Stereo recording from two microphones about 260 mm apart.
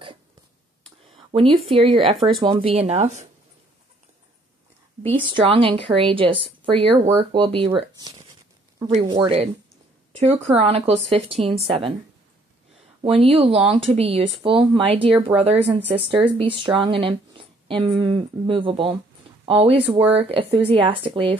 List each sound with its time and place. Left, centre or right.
0.8 s a sound: right
1.7 s speech: right
5.4 s speech: right
8.8 s speech: centre
13.0 s speech: right